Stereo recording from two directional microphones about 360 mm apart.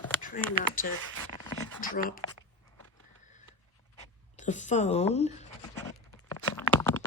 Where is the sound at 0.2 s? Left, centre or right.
Left.